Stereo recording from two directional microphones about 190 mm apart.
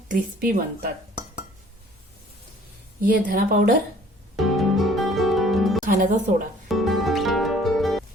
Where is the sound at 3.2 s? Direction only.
45° right (ahead or behind).